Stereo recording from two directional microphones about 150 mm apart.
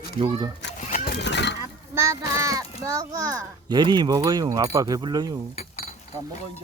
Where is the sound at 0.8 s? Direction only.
55° left (ahead or behind).